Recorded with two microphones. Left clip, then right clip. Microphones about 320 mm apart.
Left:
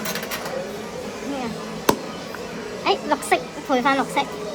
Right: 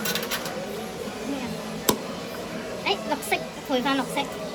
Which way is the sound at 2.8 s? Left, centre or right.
Left.